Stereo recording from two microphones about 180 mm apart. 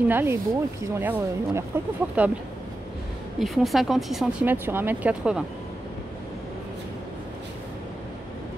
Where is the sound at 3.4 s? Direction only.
Centre (ahead or behind).